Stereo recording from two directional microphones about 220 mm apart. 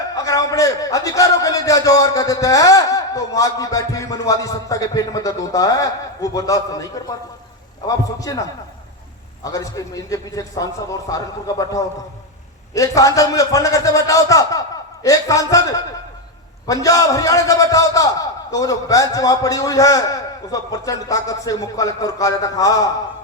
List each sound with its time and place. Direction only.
0.1 s a man's voice: 15° left (ahead or behind)